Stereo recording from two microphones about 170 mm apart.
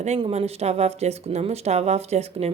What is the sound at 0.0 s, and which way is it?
A woman's voice, 40° right (ahead or behind).